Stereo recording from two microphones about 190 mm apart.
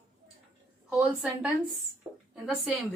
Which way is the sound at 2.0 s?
15° right (ahead or behind).